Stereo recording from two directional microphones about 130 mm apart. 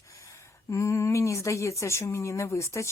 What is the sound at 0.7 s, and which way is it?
A woman's voice, 25° left (ahead or behind).